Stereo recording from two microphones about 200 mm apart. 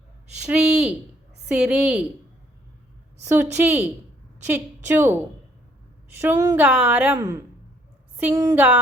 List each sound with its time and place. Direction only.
0.4 s a woman's voice: 5° right (ahead or behind)
3.6 s a woman's voice: 10° right (ahead or behind)